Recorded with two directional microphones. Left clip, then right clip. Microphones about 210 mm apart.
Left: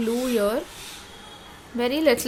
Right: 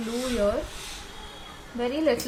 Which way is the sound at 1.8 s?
55° left (ahead or behind).